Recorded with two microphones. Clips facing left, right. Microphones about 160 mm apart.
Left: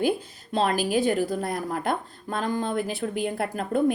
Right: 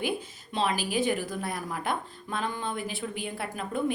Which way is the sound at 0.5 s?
45° left (ahead or behind).